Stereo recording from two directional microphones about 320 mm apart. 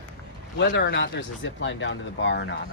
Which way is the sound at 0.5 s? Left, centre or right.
Left.